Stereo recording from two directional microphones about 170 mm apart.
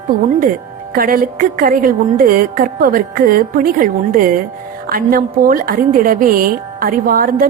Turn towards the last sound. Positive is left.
turn(degrees=-55)  # may be behind; listen again after turning